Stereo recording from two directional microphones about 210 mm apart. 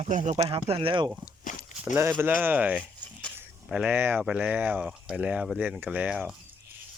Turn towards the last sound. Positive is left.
turn(degrees=-5)  # may be behind; listen again after turning